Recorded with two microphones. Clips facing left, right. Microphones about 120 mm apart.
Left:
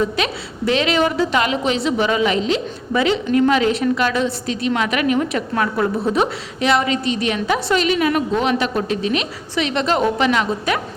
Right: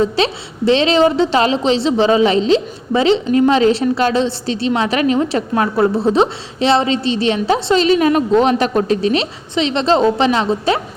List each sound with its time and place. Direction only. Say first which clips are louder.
0.0 s a woman's voice: right 4 dB; 30° right (ahead or behind)